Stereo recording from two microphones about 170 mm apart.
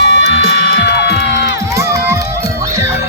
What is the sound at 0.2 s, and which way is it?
Music, 90° left.